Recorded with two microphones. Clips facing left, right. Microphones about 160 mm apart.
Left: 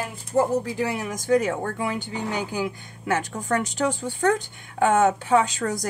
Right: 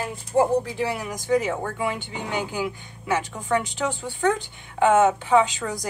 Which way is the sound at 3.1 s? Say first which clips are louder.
Even; 45° left (ahead or behind).